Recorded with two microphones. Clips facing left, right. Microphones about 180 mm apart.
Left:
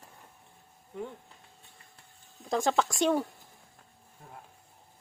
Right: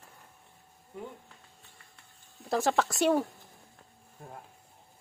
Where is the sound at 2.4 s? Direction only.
5° right (ahead or behind).